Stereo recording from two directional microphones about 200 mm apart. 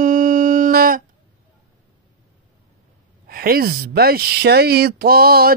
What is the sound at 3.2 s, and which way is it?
Speech, 50° right (ahead or behind).